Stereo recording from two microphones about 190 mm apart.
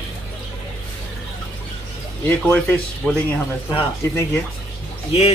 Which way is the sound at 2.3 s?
10° left (ahead or behind).